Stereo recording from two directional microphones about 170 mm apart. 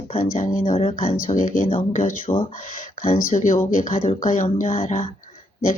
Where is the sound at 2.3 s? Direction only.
30° left (ahead or behind).